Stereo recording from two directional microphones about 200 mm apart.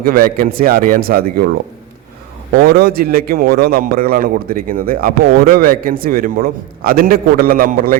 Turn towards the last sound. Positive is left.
turn(degrees=-45)  # may be behind; listen again after turning